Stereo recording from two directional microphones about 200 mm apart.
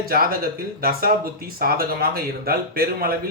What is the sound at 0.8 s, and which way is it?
Speech, 45° right (ahead or behind).